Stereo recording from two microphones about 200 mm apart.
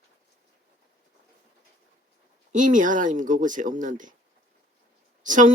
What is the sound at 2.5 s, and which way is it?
Speech, 40° right (ahead or behind).